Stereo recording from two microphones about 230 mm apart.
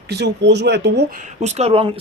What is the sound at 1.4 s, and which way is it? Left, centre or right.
Speech, right.